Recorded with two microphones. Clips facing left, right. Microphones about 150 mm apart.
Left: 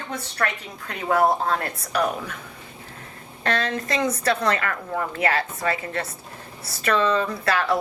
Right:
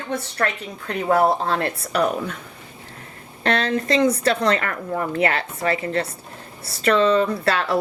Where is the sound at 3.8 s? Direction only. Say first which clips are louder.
Right 6 dB; 30° right (ahead or behind).